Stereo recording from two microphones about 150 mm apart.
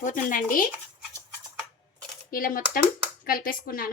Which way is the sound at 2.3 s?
70° left (ahead or behind).